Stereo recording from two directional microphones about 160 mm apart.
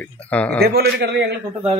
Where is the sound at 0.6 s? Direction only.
90° right.